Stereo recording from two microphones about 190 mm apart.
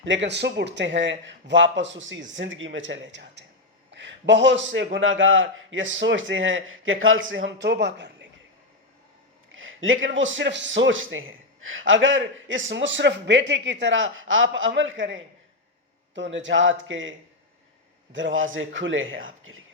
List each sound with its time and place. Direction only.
0.0 s a man's voice: 70° right (ahead or behind)
4.9 s a man's voice: 90° right; by 8.3 s 65° right (ahead or behind)
9.6 s a man's voice: 90° right